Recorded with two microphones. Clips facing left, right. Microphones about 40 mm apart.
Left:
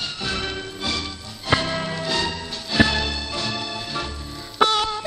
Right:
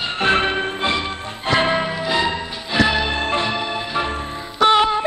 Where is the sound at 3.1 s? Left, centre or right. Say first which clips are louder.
Right 7 dB; right.